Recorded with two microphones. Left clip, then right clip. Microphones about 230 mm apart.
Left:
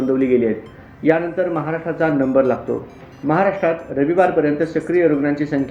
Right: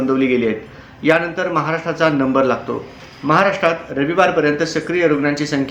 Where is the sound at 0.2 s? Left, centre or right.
Centre.